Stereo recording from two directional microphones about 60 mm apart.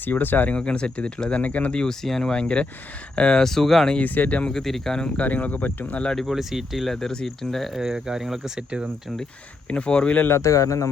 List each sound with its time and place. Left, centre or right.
0.0 s speech: left
0.5 s speech: centre
1.8 s speech: centre
3.9 s speech: left
4.5 s speech: centre
4.9 s speech: centre
6.0 s speech: centre
6.2 s speech: centre
9.6 s speech: centre
10.4 s speech: left